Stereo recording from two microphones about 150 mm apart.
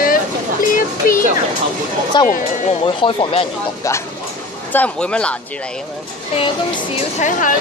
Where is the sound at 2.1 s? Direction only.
30° left (ahead or behind).